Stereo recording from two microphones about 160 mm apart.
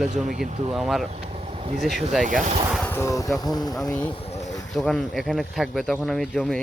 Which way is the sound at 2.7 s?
10° left (ahead or behind).